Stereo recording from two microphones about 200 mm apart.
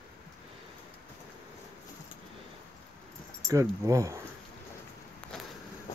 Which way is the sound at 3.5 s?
15° right (ahead or behind).